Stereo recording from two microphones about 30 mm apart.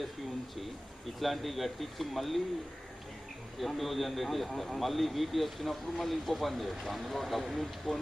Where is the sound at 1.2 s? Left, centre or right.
Centre.